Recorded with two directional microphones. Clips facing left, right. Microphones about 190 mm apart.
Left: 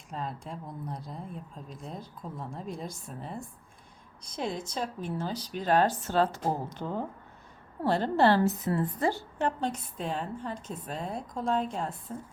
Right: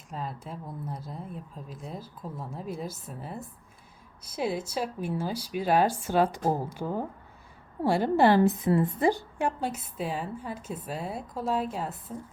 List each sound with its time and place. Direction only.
0.1 s a woman's voice: 5° right (ahead or behind)